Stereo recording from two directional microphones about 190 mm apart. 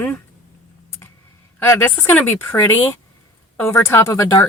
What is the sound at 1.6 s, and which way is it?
Speech, 15° left (ahead or behind).